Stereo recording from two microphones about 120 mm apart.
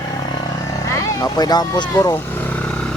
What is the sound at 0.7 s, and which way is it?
Vehicle, 25° left (ahead or behind).